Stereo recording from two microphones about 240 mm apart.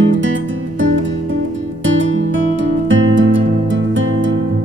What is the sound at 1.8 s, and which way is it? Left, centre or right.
Music, right.